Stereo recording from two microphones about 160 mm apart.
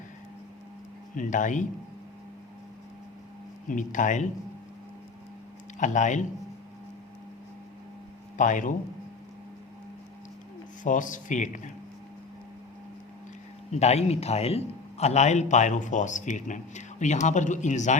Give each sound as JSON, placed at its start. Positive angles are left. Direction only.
{"t": 1.1, "sound": "a man's voice", "side_deg": 55}
{"t": 3.7, "sound": "a man's voice", "side_deg": 55}
{"t": 5.8, "sound": "a man's voice", "side_deg": 50}
{"t": 8.4, "sound": "a man's voice", "side_deg": 50}
{"t": 10.8, "sound": "a man's voice", "side_deg": 55}
{"t": 13.7, "sound": "a man's voice", "side_deg": 45}